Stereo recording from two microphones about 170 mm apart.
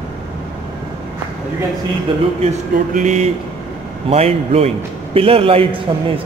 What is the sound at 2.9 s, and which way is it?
A man's voice, 45° right (ahead or behind).